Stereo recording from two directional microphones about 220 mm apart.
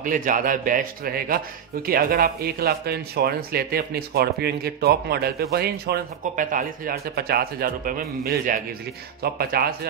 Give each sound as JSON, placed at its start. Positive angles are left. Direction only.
{"t": 0.0, "sound": "a man's voice", "side_deg": -35}